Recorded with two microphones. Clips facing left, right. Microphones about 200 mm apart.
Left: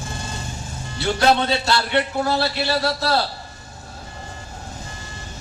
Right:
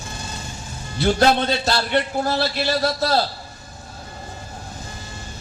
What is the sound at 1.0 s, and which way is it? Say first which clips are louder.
A man's voice: right 1 dB; 45° right (ahead or behind).